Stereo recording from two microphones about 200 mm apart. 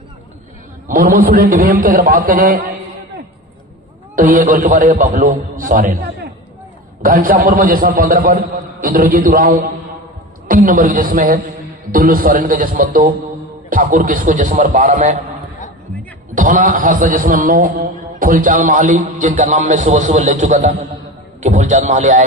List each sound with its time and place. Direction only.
0.8 s a man's voice: 45° right (ahead or behind)
4.1 s a man's voice: 45° right (ahead or behind)
7.0 s a man's voice: 45° right (ahead or behind)
16.3 s a man's voice: 40° right (ahead or behind)